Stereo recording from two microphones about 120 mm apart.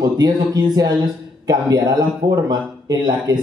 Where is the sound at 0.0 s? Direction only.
35° right (ahead or behind).